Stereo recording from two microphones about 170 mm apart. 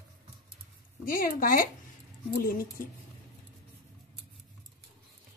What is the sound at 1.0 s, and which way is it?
Speech, 55° left (ahead or behind).